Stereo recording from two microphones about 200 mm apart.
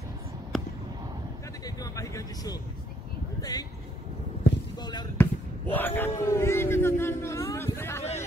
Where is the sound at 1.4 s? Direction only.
15° left (ahead or behind).